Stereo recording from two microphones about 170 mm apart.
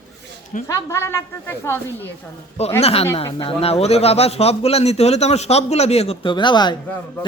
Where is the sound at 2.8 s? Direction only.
35° left (ahead or behind).